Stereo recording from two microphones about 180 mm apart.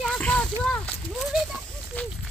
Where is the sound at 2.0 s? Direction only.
10° left (ahead or behind).